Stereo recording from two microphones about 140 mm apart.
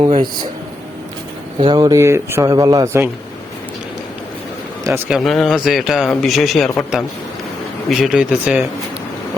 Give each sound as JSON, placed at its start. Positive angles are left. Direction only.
{"t": 0.0, "sound": "speech", "side_deg": -35}
{"t": 1.5, "sound": "speech", "side_deg": -35}
{"t": 5.0, "sound": "speech", "side_deg": 0}